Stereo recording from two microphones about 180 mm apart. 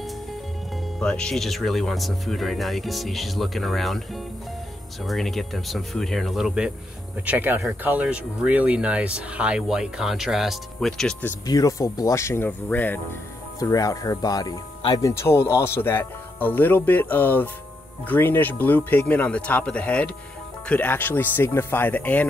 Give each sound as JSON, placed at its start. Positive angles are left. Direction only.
{"t": 0.9, "sound": "speech", "side_deg": 5}
{"t": 11.4, "sound": "speech", "side_deg": 20}